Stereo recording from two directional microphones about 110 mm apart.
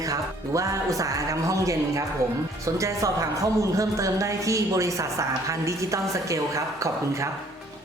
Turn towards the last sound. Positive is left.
turn(degrees=-30)  # may be behind; listen again after turning